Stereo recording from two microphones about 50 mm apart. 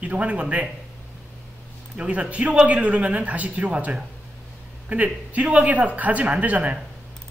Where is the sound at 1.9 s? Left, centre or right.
Right.